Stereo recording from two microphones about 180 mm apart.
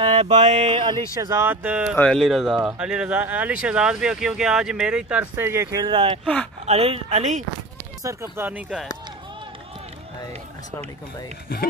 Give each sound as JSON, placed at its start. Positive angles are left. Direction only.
{"t": 0.0, "sound": "mantra", "side_deg": -35}
{"t": 1.2, "sound": "speech", "side_deg": -15}
{"t": 6.2, "sound": "speech", "side_deg": 5}
{"t": 6.6, "sound": "mantra", "side_deg": -35}
{"t": 8.0, "sound": "speech", "side_deg": -15}